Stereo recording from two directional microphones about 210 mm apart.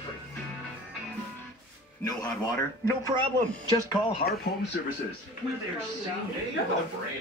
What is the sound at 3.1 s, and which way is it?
Speech, 30° right (ahead or behind).